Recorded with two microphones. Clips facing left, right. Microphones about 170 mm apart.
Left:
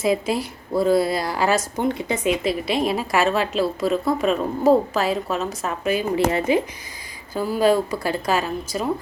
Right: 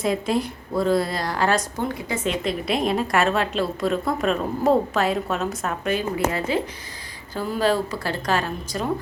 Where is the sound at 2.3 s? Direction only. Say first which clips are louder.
Left 2 dB; 5° left (ahead or behind).